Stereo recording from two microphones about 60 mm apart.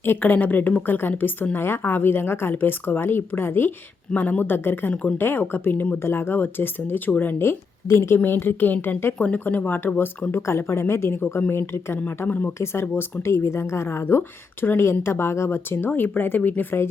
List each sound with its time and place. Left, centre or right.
0.0 s a woman's voice: left
4.1 s speech: left
6.0 s speech: left
9.1 s a woman's voice: left
10.4 s a woman's voice: left
12.5 s a woman's voice: left